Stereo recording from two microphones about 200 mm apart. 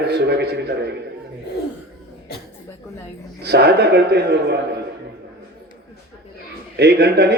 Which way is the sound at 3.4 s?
55° right (ahead or behind).